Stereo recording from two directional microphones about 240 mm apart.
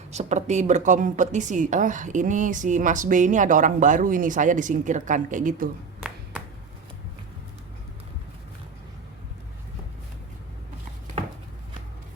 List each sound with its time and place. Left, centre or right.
0.1 s a woman's voice: right